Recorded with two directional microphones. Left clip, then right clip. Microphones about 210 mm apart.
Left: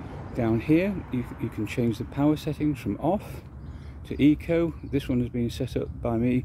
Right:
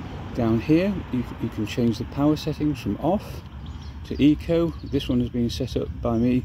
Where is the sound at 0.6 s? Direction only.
5° left (ahead or behind).